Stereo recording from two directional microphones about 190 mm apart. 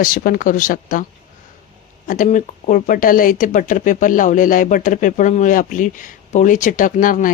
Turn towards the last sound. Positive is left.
turn(degrees=45)  # may be behind; listen again after turning